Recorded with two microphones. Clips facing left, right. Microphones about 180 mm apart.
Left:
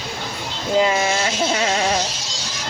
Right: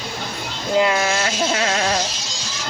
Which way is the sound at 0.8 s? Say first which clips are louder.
Even; 20° left (ahead or behind).